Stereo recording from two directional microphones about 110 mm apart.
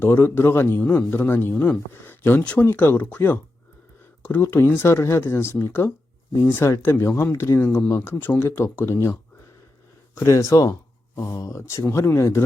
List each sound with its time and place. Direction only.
0.0 s speech: 20° left (ahead or behind)
10.2 s speech: 30° left (ahead or behind)